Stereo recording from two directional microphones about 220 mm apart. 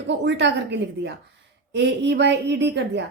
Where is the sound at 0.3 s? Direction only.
55° right (ahead or behind).